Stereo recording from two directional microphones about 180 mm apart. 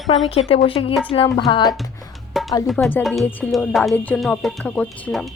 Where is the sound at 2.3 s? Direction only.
Centre (ahead or behind).